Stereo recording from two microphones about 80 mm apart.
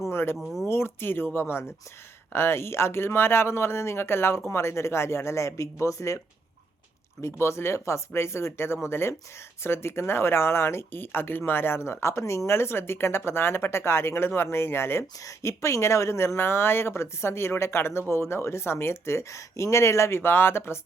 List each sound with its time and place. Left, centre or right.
0.1 s speech: left
0.3 s speech: centre
0.7 s speech: left